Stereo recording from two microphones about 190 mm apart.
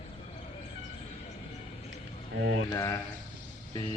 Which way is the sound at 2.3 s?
75° right (ahead or behind).